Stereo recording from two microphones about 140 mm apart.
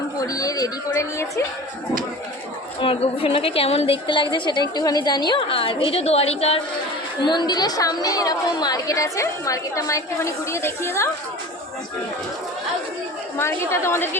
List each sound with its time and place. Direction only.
0.2 s a woman's voice: 25° left (ahead or behind)
2.8 s a woman's voice: 40° left (ahead or behind)
7.2 s a woman's voice: 35° left (ahead or behind)
13.4 s a woman's voice: 20° left (ahead or behind)